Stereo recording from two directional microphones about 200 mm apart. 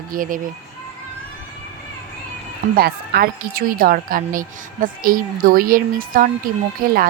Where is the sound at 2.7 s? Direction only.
50° right (ahead or behind).